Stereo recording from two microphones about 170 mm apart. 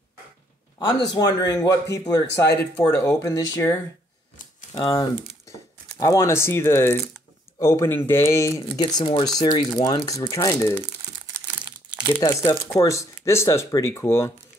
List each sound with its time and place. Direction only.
0.7 s a man's voice: 25° left (ahead or behind)
4.7 s speech: 20° left (ahead or behind)
12.2 s speech: 20° left (ahead or behind)